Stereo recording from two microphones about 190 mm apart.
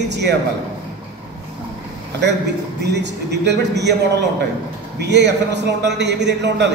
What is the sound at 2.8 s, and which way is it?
A man's voice, 65° right (ahead or behind).